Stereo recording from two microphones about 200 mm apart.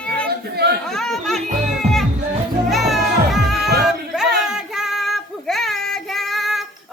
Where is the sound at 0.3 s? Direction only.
55° right (ahead or behind).